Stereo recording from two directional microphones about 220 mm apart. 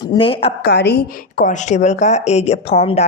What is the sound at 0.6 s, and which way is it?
A woman's voice, 50° left (ahead or behind).